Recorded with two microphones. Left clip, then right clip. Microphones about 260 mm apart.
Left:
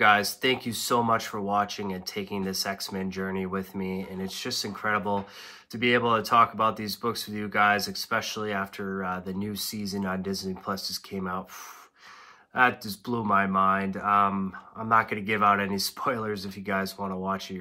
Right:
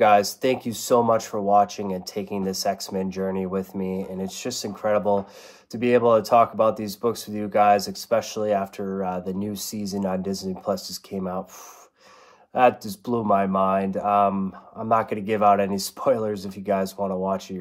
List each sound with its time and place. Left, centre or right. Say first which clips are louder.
0.0 s speech: right 4 dB; left
12.5 s speech: right 4 dB; left